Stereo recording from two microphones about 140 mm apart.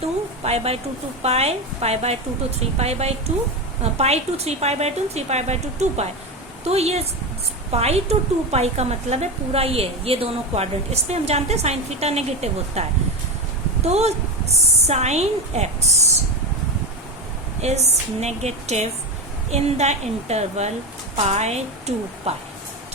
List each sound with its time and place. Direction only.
0.4 s a woman's voice: 45° right (ahead or behind)
13.8 s a woman's voice: 50° right (ahead or behind)
17.6 s a woman's voice: 50° right (ahead or behind)